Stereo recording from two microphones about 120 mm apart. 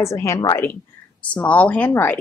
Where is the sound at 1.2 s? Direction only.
10° left (ahead or behind).